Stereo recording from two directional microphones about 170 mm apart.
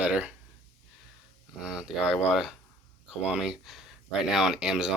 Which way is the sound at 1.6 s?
5° right (ahead or behind).